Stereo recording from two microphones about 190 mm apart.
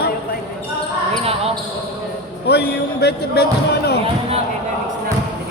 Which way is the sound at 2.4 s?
60° left (ahead or behind).